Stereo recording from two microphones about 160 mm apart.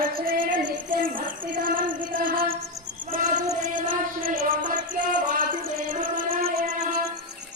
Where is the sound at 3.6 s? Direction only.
55° right (ahead or behind).